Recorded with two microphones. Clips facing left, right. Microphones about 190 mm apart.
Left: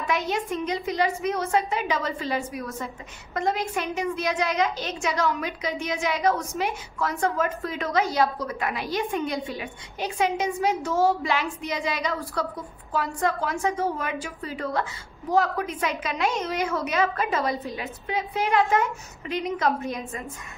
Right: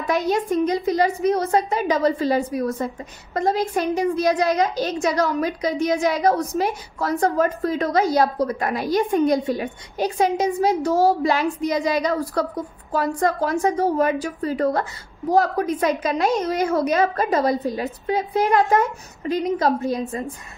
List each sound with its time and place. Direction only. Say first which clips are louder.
0.0 s a woman's voice: right 5 dB; 40° right (ahead or behind)